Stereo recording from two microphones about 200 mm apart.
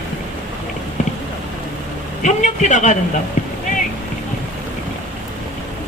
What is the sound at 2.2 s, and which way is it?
Speech, 40° left (ahead or behind).